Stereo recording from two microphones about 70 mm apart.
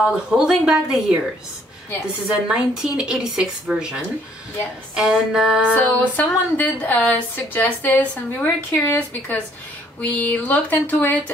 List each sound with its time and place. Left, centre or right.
0.1 s a woman's voice: centre
2.4 s a woman's voice: centre
5.7 s speech: left